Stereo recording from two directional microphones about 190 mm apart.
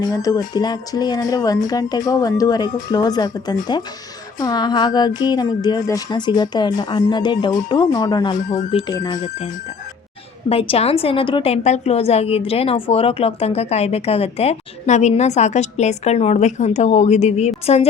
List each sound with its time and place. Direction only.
0.0 s a woman's voice: 20° left (ahead or behind)
8.4 s a woman's voice: 40° left (ahead or behind)
8.7 s a woman's voice: 30° left (ahead or behind)
10.5 s a woman's voice: 30° left (ahead or behind)